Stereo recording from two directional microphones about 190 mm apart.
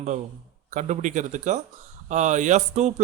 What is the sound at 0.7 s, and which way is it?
Speech, 40° right (ahead or behind).